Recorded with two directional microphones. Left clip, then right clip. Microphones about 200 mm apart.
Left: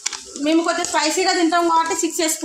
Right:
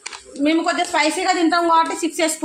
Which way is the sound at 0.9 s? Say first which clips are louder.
Left 1 dB; 45° right (ahead or behind).